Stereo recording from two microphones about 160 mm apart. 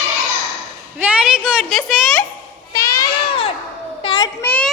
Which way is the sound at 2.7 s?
20° left (ahead or behind).